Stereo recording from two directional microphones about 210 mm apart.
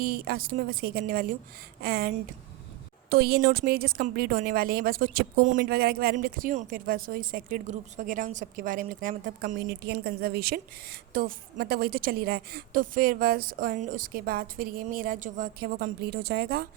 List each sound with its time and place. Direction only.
0.0 s speech: 45° right (ahead or behind)